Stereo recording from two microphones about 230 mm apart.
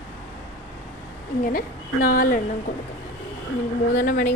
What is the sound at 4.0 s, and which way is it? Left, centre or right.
Speech, left.